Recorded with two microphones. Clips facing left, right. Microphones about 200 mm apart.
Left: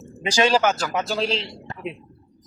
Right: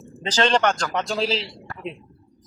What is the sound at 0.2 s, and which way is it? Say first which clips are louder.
A man's voice: left 1 dB; 10° left (ahead or behind).